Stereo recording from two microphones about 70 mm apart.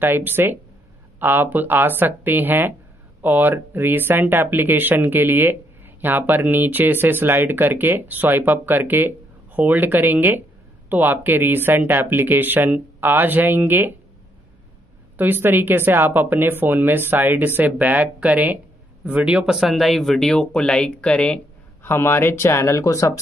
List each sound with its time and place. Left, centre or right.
0.0 s speech: right
15.1 s speech: right; by 21.4 s centre
21.8 s speech: left